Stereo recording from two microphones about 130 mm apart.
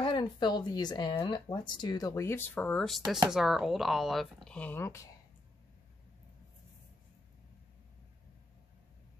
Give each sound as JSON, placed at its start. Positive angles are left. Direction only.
{"t": 0.0, "sound": "speech", "side_deg": 40}